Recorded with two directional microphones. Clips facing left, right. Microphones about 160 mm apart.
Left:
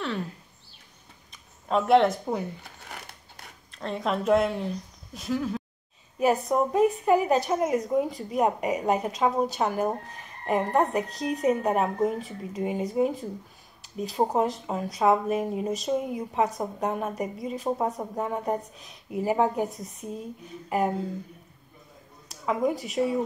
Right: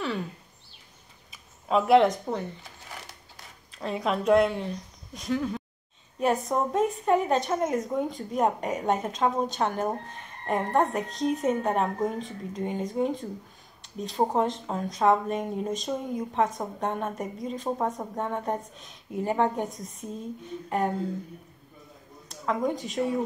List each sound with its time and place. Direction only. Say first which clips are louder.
1.3 s a sound: right 1 dB; centre (ahead or behind)
3.7 s speech: even; centre (ahead or behind)
22.3 s speech: left 2 dB; 5° left (ahead or behind)